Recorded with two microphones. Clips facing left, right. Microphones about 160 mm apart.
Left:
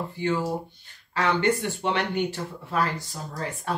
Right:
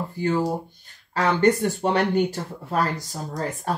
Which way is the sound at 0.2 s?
40° right (ahead or behind).